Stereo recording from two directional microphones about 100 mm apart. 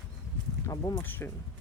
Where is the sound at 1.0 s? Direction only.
20° left (ahead or behind).